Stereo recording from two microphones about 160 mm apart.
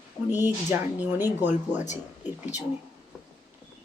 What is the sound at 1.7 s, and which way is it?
Speech, 50° left (ahead or behind).